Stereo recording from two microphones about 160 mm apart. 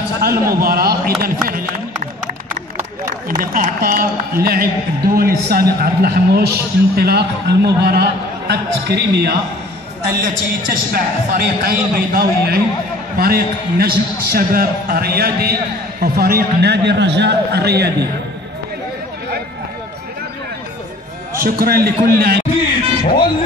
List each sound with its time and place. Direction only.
0.2 s speech: 65° right (ahead or behind)
3.3 s speech: 60° right (ahead or behind); by 9.4 s 90° right
10.0 s speech: 65° right (ahead or behind); by 17.9 s 90° right
21.3 s speech: 60° right (ahead or behind)